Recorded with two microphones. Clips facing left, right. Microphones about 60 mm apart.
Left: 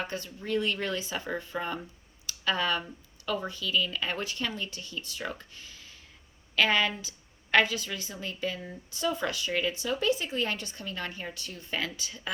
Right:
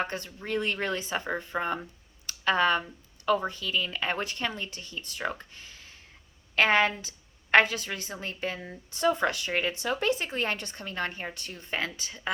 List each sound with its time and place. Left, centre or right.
0.0 s a woman's voice: right
2.2 s a sound: right
3.2 s a woman's voice: right